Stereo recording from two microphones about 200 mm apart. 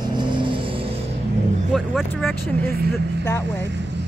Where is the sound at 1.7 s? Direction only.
Centre (ahead or behind).